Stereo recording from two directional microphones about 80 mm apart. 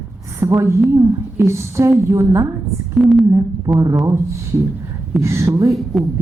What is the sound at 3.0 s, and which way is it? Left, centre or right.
Speech, centre.